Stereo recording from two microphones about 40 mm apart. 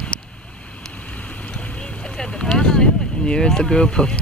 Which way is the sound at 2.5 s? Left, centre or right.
Centre.